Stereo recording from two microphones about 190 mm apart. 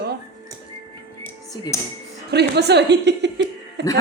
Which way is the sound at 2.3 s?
60° right (ahead or behind).